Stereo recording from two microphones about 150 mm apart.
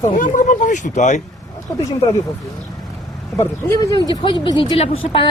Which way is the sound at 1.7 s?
15° left (ahead or behind).